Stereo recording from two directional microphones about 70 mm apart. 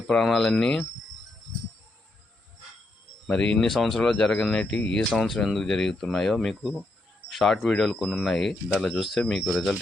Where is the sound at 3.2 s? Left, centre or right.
Centre.